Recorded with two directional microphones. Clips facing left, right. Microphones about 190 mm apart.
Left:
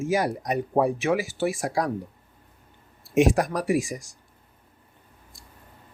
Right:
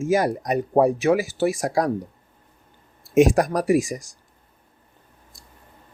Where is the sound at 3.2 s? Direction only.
45° right (ahead or behind).